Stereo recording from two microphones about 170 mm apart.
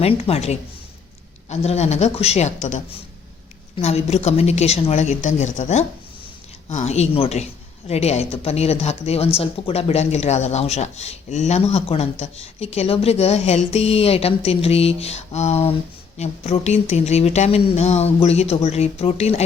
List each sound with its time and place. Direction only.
0.0 s speech: 35° left (ahead or behind)